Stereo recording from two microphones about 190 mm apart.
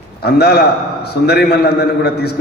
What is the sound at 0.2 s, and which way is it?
A man's voice, 60° left (ahead or behind).